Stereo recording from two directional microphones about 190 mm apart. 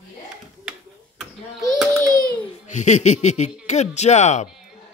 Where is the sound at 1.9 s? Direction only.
15° right (ahead or behind).